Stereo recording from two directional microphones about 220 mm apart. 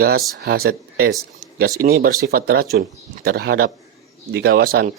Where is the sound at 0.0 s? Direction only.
45° right (ahead or behind).